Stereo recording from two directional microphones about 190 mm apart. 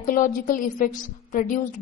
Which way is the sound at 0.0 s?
45° left (ahead or behind).